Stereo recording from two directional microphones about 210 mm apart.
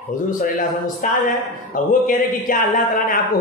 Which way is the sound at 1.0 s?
40° left (ahead or behind).